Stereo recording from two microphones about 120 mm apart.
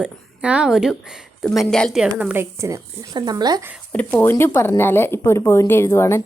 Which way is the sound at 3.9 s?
15° left (ahead or behind).